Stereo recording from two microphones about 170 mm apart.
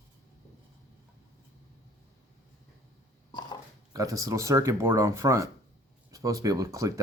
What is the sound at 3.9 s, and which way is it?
Speech, 20° right (ahead or behind).